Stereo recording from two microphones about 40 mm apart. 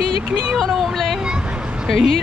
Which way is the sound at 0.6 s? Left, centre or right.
Centre.